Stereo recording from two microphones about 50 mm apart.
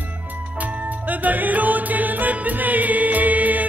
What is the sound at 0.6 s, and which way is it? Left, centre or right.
Music, right.